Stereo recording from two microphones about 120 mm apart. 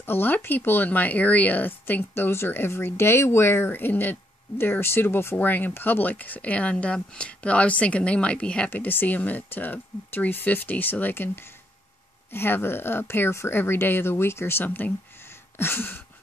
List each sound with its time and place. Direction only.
0.0 s speech: 15° left (ahead or behind)
12.3 s speech: 20° left (ahead or behind)